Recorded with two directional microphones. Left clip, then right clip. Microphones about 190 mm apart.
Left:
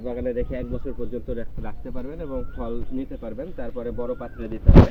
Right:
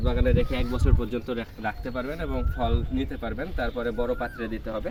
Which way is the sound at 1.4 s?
45° right (ahead or behind).